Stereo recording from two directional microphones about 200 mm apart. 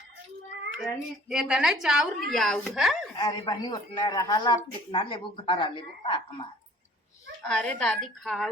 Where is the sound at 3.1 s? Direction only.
20° left (ahead or behind).